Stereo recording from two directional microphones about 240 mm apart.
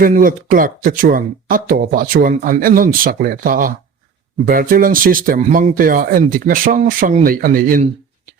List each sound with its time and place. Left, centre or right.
0.0 s speech: right